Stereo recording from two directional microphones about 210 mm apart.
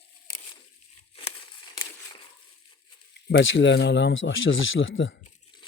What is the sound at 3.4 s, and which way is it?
Speech, 65° left (ahead or behind).